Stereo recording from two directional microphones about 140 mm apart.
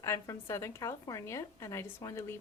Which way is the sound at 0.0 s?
20° left (ahead or behind).